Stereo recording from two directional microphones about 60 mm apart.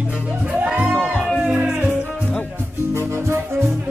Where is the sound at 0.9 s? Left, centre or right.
Centre.